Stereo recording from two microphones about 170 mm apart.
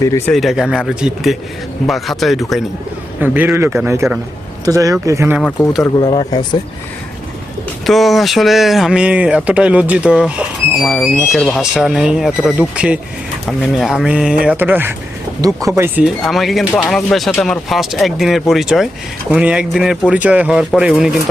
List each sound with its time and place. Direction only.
0.3 s speech: centre (ahead or behind)
3.2 s a man's voice: 10° right (ahead or behind)
5.4 s speech: 10° left (ahead or behind)
6.0 s speech: 30° left (ahead or behind)
7.9 s speech: centre (ahead or behind); by 16.0 s 15° right (ahead or behind)
16.0 s speech: centre (ahead or behind)